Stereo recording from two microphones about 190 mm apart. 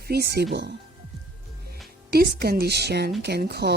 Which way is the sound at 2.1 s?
55° right (ahead or behind).